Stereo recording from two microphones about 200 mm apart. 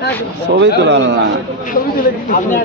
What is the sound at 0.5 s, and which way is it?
Speech, 60° right (ahead or behind).